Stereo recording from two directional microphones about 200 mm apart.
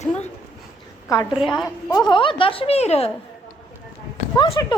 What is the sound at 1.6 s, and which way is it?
A woman's voice, 20° left (ahead or behind).